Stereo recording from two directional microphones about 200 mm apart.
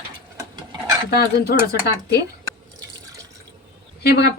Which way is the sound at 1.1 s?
50° left (ahead or behind).